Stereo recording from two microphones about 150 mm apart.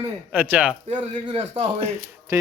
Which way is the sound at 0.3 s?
10° right (ahead or behind).